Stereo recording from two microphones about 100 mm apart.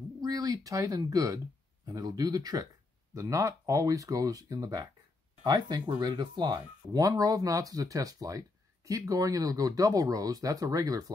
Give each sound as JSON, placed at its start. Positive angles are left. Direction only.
{"t": 0.2, "sound": "speech", "side_deg": -40}